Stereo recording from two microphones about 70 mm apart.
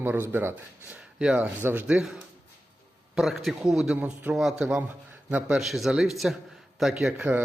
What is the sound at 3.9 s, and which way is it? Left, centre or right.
A man's voice, right.